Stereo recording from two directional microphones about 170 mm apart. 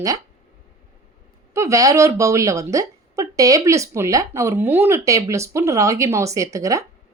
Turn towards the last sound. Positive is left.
turn(degrees=-20)  # may be behind; listen again after turning